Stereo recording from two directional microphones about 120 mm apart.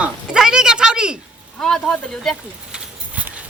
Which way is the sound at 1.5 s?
5° left (ahead or behind).